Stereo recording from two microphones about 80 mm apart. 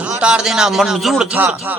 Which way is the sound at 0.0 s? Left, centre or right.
Centre.